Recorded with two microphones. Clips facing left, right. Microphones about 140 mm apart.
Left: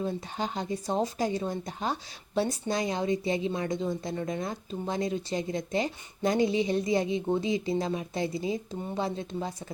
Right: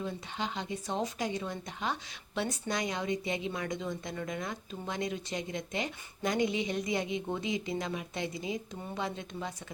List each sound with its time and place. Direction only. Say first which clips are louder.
0.0 s speech: left 5 dB; 40° left (ahead or behind)